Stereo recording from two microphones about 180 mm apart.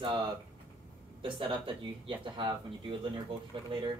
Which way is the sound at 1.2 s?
30° right (ahead or behind).